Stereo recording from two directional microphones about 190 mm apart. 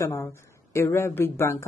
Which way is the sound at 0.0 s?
15° left (ahead or behind).